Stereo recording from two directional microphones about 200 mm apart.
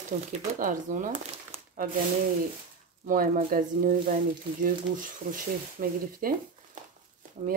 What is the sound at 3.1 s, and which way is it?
Speech, 45° right (ahead or behind).